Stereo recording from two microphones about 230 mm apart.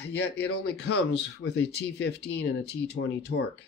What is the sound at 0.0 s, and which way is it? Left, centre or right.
Speech, left.